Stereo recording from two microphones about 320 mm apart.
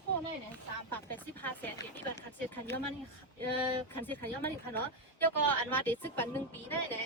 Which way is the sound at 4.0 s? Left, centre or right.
Centre.